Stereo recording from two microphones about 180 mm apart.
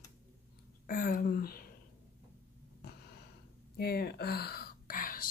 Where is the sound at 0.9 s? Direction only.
50° left (ahead or behind).